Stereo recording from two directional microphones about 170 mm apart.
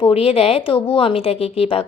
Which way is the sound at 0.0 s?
35° left (ahead or behind).